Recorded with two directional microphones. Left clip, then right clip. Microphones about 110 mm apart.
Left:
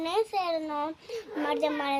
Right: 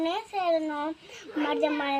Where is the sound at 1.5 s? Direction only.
45° left (ahead or behind).